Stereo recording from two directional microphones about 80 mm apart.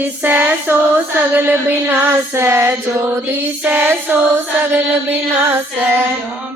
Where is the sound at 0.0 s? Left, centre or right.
Right.